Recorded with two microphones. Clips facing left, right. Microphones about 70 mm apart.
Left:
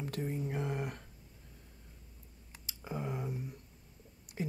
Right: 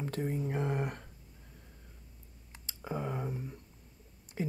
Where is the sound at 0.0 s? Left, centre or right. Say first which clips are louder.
Right 3 dB; right.